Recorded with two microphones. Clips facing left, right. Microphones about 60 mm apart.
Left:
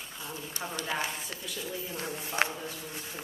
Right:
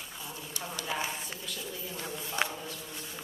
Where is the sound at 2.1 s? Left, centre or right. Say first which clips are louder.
Left 2 dB; left.